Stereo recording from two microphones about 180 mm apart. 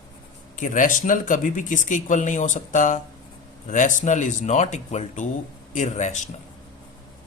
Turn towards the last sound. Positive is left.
turn(degrees=40)  # may be behind; listen again after turning